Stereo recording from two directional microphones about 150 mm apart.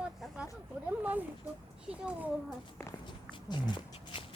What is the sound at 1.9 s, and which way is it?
Speech, 5° right (ahead or behind).